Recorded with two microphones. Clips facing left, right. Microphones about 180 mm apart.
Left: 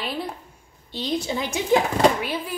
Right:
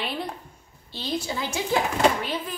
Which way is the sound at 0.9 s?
20° left (ahead or behind).